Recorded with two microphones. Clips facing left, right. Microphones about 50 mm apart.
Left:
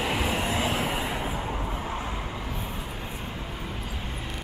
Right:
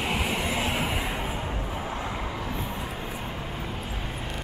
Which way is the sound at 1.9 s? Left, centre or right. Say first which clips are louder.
Right 1 dB; centre.